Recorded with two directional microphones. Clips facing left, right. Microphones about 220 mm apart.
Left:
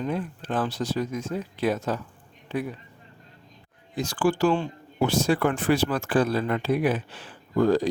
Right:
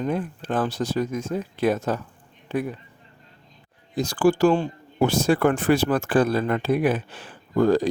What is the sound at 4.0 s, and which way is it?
Speech, 40° right (ahead or behind).